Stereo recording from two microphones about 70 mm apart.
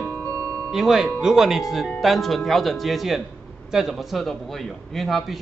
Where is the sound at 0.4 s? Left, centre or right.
Right.